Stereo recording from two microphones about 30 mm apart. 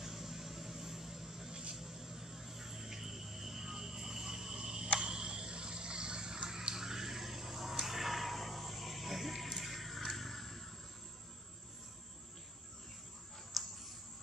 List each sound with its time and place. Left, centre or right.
0.0 s vehicle: centre
1.5 s vehicle: right
1.8 s vehicle: centre
4.9 s a sound: right; by 7.7 s centre
7.8 s music: centre
13.5 s a sound: centre